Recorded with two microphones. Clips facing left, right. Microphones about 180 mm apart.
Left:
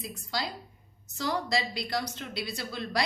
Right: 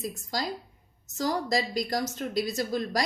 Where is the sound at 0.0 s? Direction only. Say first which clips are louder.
Right 3 dB; 45° right (ahead or behind).